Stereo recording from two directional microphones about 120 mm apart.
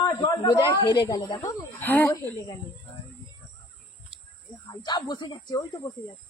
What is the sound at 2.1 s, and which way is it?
Speech, 30° left (ahead or behind).